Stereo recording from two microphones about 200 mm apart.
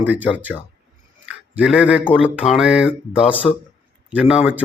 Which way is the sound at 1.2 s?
5° right (ahead or behind).